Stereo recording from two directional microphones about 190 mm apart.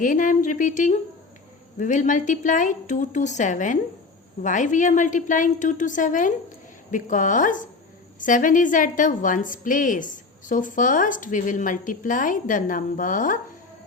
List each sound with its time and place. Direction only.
0.0 s a woman's voice: 45° left (ahead or behind)